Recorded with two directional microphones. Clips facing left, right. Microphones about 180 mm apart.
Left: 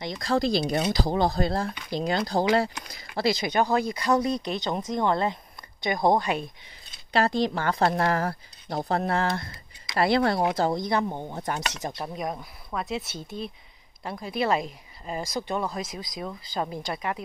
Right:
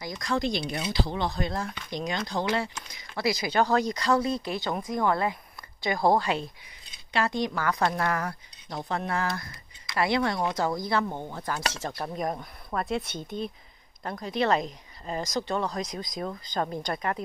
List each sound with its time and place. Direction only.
0.0 s speech: 30° left (ahead or behind)
3.2 s speech: 25° left (ahead or behind)
7.1 s speech: 35° left (ahead or behind); by 12.1 s 15° left (ahead or behind)
12.2 s speech: 5° left (ahead or behind)